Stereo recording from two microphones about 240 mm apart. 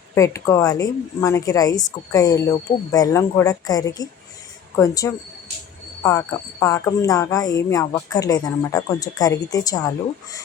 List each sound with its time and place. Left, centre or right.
0.1 s speech: centre